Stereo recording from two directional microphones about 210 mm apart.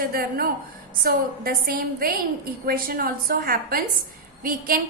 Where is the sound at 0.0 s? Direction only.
45° right (ahead or behind).